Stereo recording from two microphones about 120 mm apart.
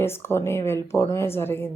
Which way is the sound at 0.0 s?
20° left (ahead or behind).